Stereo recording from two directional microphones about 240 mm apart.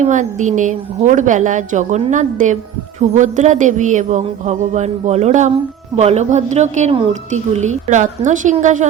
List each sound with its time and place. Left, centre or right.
0.0 s a woman's voice: right